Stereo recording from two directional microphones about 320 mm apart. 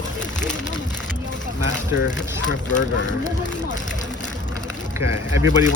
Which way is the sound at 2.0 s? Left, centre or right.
Left.